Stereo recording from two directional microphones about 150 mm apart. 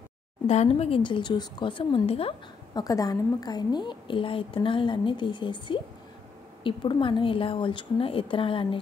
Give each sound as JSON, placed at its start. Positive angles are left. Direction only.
{"t": 0.5, "sound": "a woman's voice", "side_deg": 45}
{"t": 2.7, "sound": "a woman's voice", "side_deg": 25}